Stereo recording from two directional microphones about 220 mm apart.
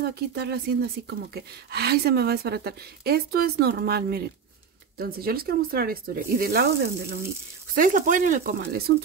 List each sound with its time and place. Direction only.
0.0 s speech: 50° right (ahead or behind)